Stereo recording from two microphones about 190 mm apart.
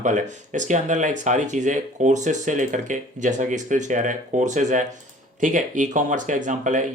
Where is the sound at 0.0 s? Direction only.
40° right (ahead or behind).